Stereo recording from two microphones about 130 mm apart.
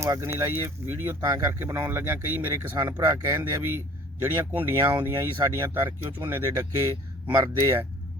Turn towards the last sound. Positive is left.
turn(degrees=-20)  # may be behind; listen again after turning